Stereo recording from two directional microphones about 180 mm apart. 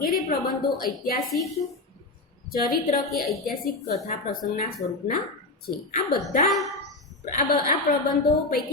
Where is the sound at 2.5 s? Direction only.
55° left (ahead or behind).